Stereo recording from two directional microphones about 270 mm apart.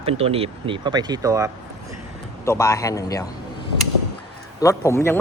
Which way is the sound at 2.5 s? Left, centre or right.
Centre.